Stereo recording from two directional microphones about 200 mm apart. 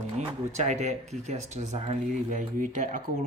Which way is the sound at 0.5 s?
35° right (ahead or behind).